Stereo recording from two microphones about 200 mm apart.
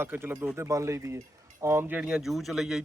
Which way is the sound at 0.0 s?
10° right (ahead or behind).